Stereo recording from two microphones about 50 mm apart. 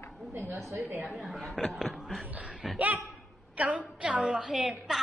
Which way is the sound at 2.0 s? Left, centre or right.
Centre.